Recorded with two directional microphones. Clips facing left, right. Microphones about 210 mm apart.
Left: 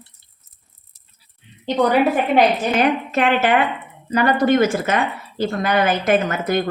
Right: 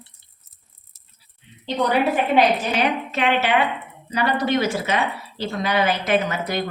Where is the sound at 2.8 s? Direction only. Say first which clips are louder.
Left 4 dB; 50° left (ahead or behind).